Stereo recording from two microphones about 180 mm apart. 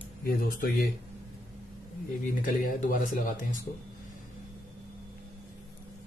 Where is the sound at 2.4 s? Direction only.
50° left (ahead or behind).